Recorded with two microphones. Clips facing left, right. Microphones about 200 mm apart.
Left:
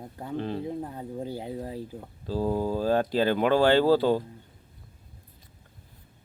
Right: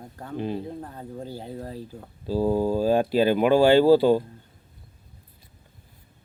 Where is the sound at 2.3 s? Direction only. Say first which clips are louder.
Right 4 dB; 10° right (ahead or behind).